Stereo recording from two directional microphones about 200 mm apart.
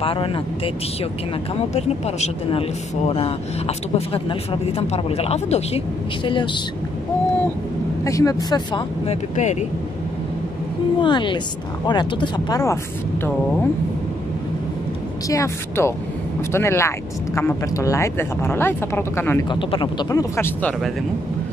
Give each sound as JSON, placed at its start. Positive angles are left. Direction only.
{"t": 0.0, "sound": "speech", "side_deg": 25}
{"t": 1.7, "sound": "speech", "side_deg": 35}
{"t": 8.0, "sound": "speech", "side_deg": 15}
{"t": 9.0, "sound": "speech", "side_deg": 35}
{"t": 11.0, "sound": "speech", "side_deg": 25}
{"t": 15.2, "sound": "speech", "side_deg": 15}
{"t": 19.7, "sound": "speech", "side_deg": 25}